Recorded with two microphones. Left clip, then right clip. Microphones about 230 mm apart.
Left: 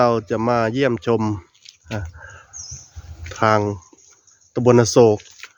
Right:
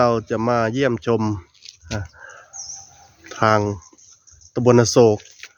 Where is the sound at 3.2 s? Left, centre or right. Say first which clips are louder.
Even; centre.